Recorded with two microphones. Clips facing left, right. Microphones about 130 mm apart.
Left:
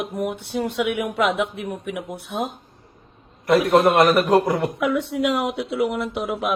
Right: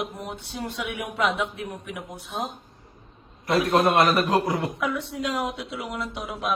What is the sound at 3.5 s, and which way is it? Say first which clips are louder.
A man's voice: left 5 dB; 50° left (ahead or behind).